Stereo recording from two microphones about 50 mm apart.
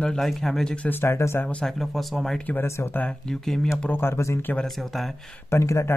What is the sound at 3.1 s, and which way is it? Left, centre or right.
Speech, centre.